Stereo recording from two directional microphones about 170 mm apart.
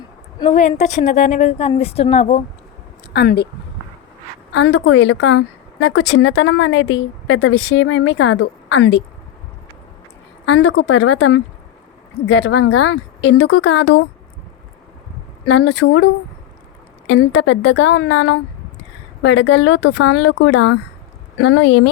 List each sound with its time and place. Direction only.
0.8 s speech: 45° left (ahead or behind)
3.1 s speech: 70° left (ahead or behind)
4.5 s a woman's voice: 90° left
10.4 s a woman's voice: 90° left
15.4 s a woman's voice: 90° left
17.1 s a woman's voice: 90° left